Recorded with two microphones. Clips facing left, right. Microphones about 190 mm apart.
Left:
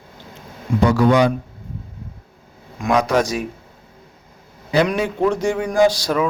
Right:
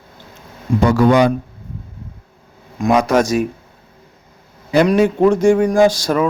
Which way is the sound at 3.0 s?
45° right (ahead or behind).